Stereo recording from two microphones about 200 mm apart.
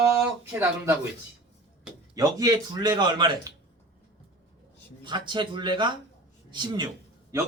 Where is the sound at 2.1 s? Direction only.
20° right (ahead or behind).